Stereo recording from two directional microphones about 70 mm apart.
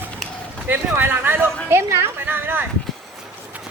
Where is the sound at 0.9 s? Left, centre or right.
Right.